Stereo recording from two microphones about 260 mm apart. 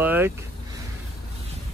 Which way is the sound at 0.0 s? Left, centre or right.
Centre.